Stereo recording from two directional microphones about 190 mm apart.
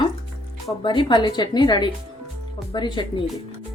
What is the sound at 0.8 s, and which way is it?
A woman's voice, 25° left (ahead or behind).